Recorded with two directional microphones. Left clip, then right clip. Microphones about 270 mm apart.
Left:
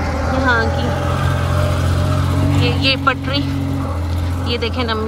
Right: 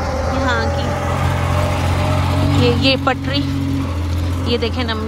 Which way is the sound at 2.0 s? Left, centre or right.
Centre.